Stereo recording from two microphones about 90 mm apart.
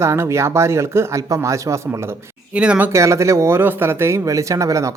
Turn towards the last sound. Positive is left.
turn(degrees=-35)  # may be behind; listen again after turning